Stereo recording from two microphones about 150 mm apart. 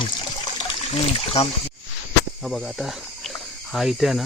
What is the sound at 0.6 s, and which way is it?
Trickle, 40° left (ahead or behind).